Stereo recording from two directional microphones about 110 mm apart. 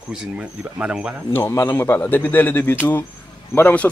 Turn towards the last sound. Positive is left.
turn(degrees=15)  # may be behind; listen again after turning